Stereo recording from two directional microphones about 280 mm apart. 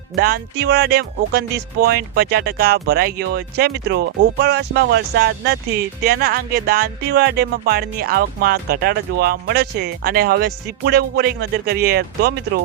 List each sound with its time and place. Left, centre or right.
0.2 s speech: right